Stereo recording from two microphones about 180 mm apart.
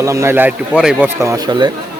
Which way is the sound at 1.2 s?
20° right (ahead or behind).